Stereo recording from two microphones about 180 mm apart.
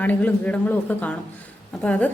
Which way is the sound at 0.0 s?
5° left (ahead or behind).